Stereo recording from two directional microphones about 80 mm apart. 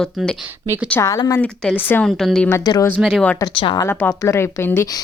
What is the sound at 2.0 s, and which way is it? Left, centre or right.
Speech, centre.